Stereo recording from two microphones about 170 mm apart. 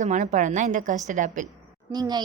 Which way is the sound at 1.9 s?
25° right (ahead or behind).